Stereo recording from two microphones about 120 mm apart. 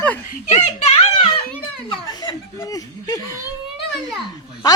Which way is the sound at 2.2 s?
30° left (ahead or behind).